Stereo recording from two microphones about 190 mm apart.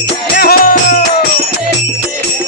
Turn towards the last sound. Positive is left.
turn(degrees=50)  # may be behind; listen again after turning